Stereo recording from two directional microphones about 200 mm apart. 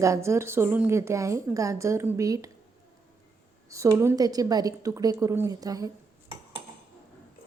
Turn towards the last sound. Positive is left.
turn(degrees=-15)  # may be behind; listen again after turning